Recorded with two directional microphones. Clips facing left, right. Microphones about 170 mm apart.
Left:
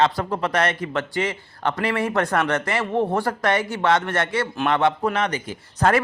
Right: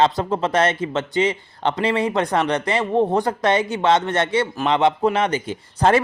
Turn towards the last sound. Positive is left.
turn(degrees=-20)  # may be behind; listen again after turning